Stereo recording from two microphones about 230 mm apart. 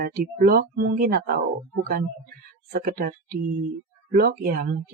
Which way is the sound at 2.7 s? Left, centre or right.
Right.